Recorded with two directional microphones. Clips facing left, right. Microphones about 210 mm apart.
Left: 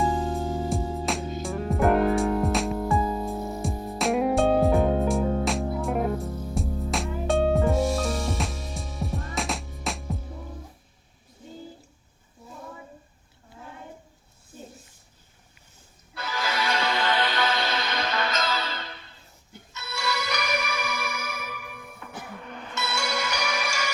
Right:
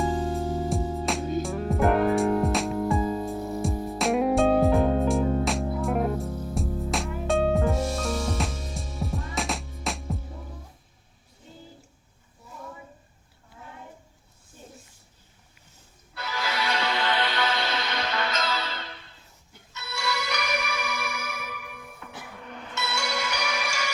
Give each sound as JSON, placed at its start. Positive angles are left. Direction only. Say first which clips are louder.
{"t": 0.0, "sound": "music", "louder": "even", "side_deg": 0}
{"t": 16.1, "sound": "music", "louder": "left 1 dB", "side_deg": 45}